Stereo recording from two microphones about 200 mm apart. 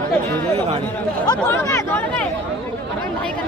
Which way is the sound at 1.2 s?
20° left (ahead or behind).